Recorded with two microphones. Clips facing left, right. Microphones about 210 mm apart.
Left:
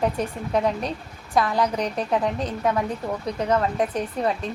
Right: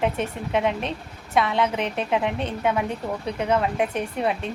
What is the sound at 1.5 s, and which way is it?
Speech, 25° right (ahead or behind).